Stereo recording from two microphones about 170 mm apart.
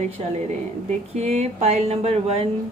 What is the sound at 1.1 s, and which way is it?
Speech, 40° right (ahead or behind).